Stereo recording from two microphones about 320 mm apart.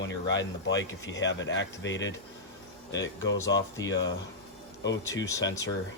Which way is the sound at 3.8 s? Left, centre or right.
Centre.